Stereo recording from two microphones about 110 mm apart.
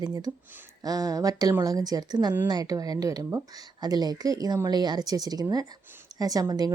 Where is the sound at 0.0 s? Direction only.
35° right (ahead or behind).